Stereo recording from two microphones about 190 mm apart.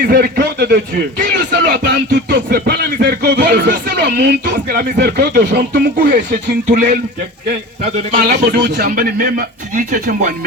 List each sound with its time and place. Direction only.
0.0 s a man's voice: 50° right (ahead or behind)
8.1 s a man's voice: 50° right (ahead or behind)